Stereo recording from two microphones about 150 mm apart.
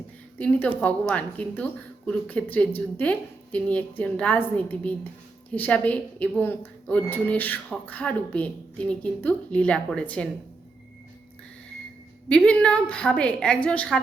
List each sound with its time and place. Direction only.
0.3 s a woman's voice: 10° left (ahead or behind)
12.3 s a woman's voice: 5° left (ahead or behind)